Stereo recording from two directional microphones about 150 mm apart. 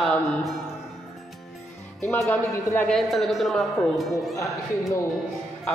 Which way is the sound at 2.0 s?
15° left (ahead or behind).